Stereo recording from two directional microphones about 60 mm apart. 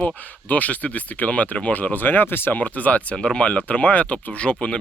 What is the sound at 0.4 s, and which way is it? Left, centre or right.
Speech, left.